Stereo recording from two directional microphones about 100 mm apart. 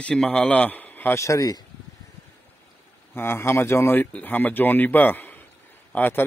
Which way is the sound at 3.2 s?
25° left (ahead or behind).